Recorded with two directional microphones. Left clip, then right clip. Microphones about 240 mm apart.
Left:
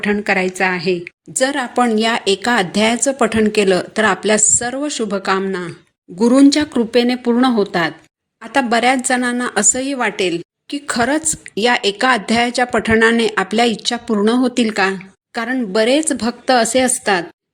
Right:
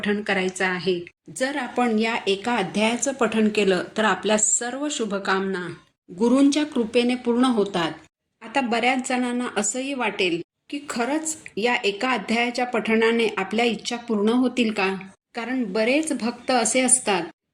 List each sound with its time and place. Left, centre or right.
0.0 s a woman's voice: left
7.0 s a woman's voice: left